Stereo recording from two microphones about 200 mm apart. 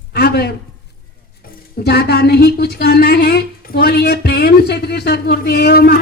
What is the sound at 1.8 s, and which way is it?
A woman's voice, 55° left (ahead or behind).